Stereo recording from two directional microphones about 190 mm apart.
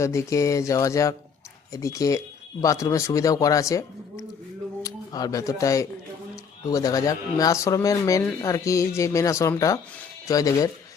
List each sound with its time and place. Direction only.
0.0 s speech: 15° left (ahead or behind)